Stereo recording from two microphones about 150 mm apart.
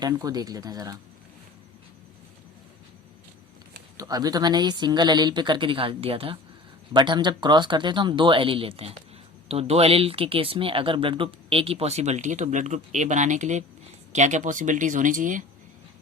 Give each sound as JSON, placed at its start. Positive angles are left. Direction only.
{"t": 0.0, "sound": "a woman's voice", "side_deg": -25}
{"t": 3.9, "sound": "a woman's voice", "side_deg": -25}